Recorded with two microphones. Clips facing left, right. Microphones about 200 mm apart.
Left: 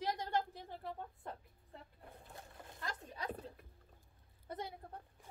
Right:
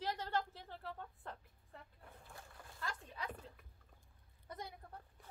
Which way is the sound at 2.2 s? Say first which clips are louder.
Left 2 dB; 20° left (ahead or behind).